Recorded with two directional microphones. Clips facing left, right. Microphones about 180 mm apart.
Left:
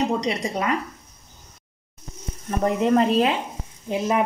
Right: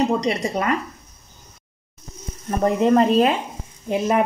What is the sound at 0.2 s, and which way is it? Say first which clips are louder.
Speech: right 3 dB; 50° right (ahead or behind).